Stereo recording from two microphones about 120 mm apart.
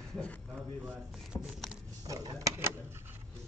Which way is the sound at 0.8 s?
5° right (ahead or behind).